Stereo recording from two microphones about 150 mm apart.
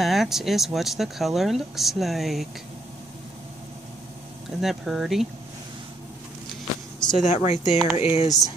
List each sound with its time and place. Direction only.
0.0 s speech: centre (ahead or behind)
4.5 s speech: centre (ahead or behind)
6.5 s vehicle: 5° left (ahead or behind)
7.2 s speech: 50° left (ahead or behind)
8.3 s speech: 25° left (ahead or behind)